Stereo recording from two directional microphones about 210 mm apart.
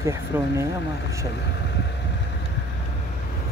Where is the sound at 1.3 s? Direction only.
55° left (ahead or behind).